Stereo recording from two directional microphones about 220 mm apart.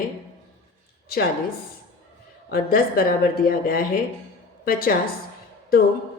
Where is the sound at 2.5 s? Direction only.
45° left (ahead or behind).